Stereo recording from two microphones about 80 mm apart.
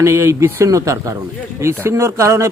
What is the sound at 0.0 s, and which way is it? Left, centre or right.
A man's voice, right.